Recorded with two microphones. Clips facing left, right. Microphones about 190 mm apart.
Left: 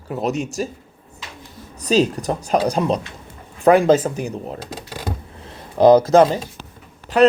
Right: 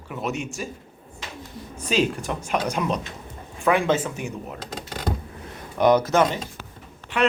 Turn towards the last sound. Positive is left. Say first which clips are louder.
# left 9 dB
turn(degrees=40)  # may be behind; listen again after turning